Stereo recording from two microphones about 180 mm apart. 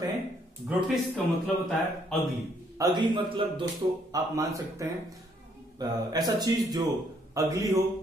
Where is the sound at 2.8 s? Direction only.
25° right (ahead or behind).